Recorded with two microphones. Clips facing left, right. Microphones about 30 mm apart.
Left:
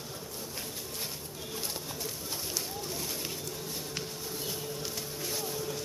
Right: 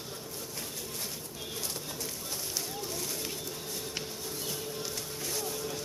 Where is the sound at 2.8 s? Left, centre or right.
Centre.